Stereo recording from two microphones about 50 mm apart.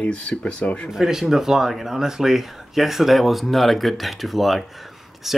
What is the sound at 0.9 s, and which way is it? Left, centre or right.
Speech, centre.